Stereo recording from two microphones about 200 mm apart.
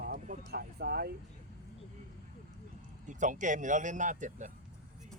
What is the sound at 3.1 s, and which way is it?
Speech, 40° right (ahead or behind).